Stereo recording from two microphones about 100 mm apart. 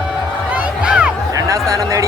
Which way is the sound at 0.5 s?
10° right (ahead or behind).